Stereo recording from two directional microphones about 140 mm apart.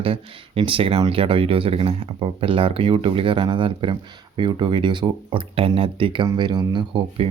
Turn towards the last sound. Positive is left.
turn(degrees=-40)  # may be behind; listen again after turning